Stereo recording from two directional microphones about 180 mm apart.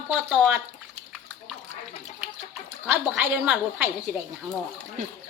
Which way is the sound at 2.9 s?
5° right (ahead or behind).